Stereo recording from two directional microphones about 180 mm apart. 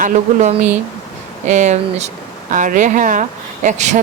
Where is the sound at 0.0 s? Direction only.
45° right (ahead or behind).